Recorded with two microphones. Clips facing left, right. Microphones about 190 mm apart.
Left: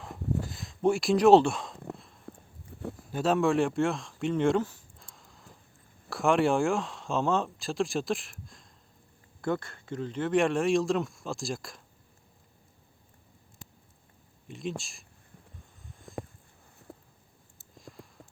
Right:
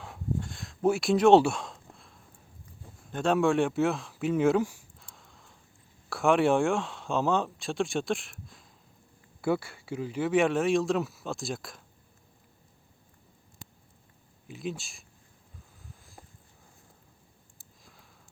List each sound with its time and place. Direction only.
0.4 s speech: centre (ahead or behind)
2.3 s walk: 75° left (ahead or behind)
2.7 s a sound: 70° left (ahead or behind)
3.1 s speech: 5° left (ahead or behind)
14.4 s speech: centre (ahead or behind)
17.7 s a sound: centre (ahead or behind)